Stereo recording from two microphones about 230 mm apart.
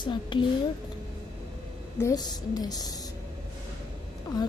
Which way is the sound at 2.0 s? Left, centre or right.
Centre.